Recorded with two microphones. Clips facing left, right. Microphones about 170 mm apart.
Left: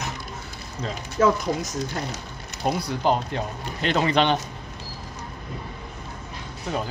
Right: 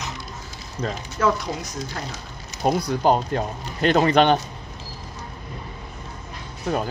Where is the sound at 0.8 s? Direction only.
50° right (ahead or behind).